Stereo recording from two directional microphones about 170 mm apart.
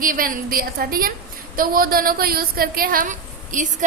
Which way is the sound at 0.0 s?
55° right (ahead or behind).